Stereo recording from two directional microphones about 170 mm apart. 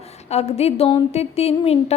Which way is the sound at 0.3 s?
40° left (ahead or behind).